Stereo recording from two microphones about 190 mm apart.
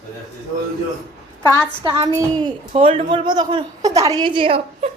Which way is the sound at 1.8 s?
20° right (ahead or behind).